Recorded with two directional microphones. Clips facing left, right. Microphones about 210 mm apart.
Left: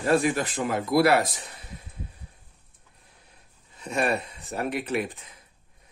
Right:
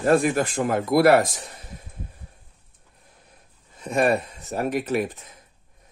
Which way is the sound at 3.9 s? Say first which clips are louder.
Right 5 dB; 45° right (ahead or behind).